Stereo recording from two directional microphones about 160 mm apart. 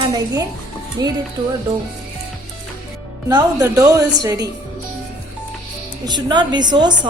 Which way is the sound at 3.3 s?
25° right (ahead or behind).